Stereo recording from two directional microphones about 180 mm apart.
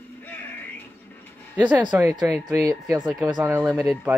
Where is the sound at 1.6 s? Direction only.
10° right (ahead or behind).